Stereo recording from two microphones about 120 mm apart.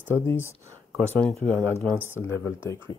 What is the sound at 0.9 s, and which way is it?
Speech, 10° left (ahead or behind).